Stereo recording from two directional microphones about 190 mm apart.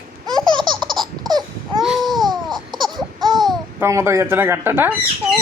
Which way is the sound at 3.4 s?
15° right (ahead or behind).